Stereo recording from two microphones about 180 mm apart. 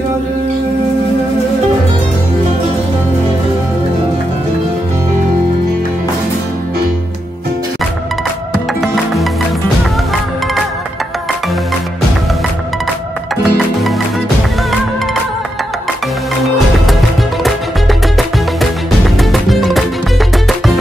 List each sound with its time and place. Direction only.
8.8 s music: centre (ahead or behind)
13.4 s music: centre (ahead or behind)
17.4 s music: centre (ahead or behind)